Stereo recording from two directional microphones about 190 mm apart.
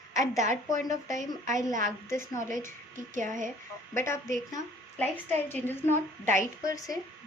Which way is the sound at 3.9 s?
15° left (ahead or behind).